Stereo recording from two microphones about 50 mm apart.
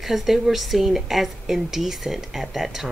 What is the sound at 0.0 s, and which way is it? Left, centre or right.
A woman's voice, centre.